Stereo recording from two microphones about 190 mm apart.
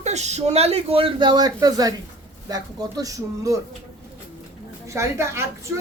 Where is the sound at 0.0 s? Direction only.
35° right (ahead or behind); by 3.6 s 15° right (ahead or behind).